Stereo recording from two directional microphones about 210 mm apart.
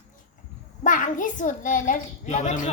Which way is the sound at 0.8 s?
40° left (ahead or behind).